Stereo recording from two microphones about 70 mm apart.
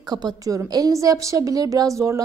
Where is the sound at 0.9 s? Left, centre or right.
Right.